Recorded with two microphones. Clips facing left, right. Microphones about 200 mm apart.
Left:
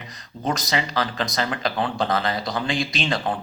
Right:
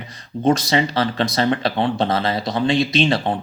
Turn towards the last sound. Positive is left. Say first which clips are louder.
# right 6 dB
turn(degrees=-25)  # may be behind; listen again after turning